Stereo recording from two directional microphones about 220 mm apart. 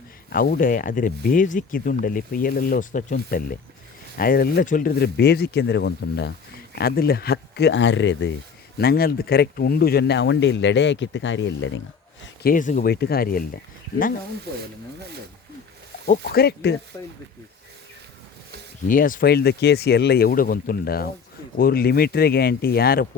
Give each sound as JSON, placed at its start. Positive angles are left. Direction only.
{"t": 0.3, "sound": "speech", "side_deg": 40}
{"t": 8.8, "sound": "speech", "side_deg": 45}
{"t": 12.2, "sound": "speech", "side_deg": 45}
{"t": 16.3, "sound": "speech", "side_deg": 45}
{"t": 18.9, "sound": "speech", "side_deg": 40}